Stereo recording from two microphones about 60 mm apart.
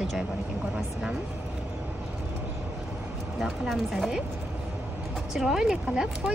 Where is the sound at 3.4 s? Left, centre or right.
Centre.